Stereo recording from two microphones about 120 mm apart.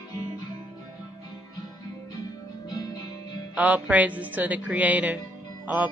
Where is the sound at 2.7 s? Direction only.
30° left (ahead or behind).